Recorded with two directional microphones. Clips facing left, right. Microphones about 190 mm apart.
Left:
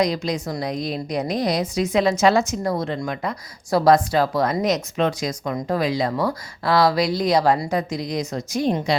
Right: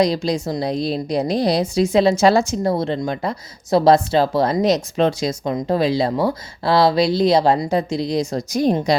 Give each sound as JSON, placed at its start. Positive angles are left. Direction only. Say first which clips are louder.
{"t": 0.0, "sound": "a woman's voice", "louder": "right 4 dB", "side_deg": -30}